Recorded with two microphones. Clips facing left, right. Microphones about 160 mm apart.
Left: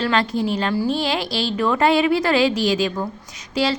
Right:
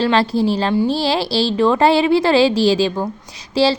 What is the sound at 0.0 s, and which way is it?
A woman's voice, 30° right (ahead or behind).